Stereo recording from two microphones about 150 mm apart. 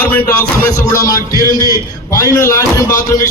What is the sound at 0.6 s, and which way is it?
A man's voice, 20° left (ahead or behind).